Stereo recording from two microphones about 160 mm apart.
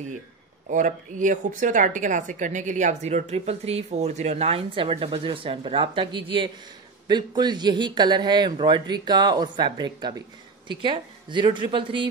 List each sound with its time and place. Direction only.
0.7 s a woman's voice: 50° right (ahead or behind); by 12.1 s 30° right (ahead or behind)